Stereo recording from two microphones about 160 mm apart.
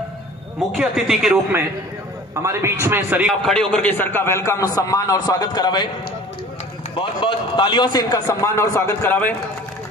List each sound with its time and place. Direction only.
0.7 s speech: centre (ahead or behind)
2.4 s a man's voice: 15° right (ahead or behind)
3.4 s a man's voice: 5° left (ahead or behind); by 5.9 s 25° left (ahead or behind)
7.0 s a man's voice: 30° left (ahead or behind); by 9.3 s 15° left (ahead or behind)